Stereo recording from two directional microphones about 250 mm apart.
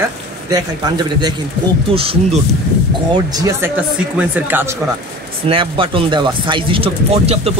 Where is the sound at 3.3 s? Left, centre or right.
Centre.